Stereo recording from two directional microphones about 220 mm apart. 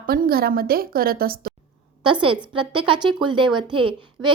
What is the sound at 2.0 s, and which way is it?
A woman's voice, 20° right (ahead or behind).